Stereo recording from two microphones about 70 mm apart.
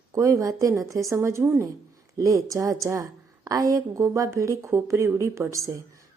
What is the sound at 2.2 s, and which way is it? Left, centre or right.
A woman's voice, right.